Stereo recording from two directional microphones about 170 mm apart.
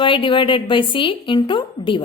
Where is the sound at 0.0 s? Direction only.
30° left (ahead or behind).